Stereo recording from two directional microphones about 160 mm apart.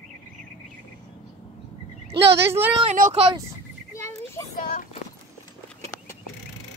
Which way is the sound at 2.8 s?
45° right (ahead or behind).